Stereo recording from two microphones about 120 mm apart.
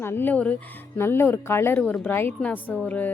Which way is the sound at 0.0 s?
20° left (ahead or behind).